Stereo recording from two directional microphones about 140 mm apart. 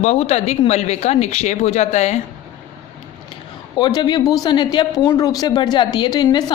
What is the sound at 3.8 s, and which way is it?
A woman's voice, 30° left (ahead or behind).